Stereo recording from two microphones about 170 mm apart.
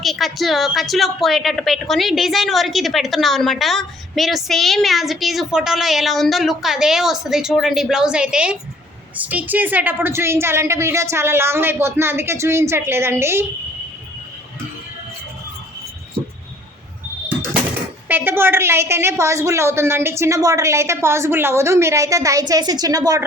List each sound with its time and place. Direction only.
0.0 s a woman's voice: centre (ahead or behind)
18.1 s a woman's voice: 15° right (ahead or behind)